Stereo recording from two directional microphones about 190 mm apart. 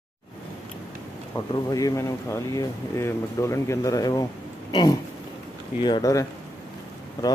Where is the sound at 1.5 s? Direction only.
20° left (ahead or behind).